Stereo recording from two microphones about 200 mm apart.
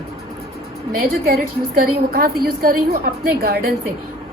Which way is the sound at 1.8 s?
50° right (ahead or behind).